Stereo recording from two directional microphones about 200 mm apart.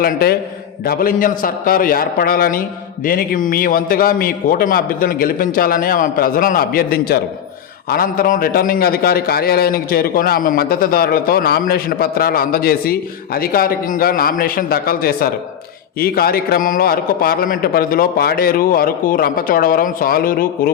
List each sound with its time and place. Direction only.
0.0 s a man's voice: 50° left (ahead or behind)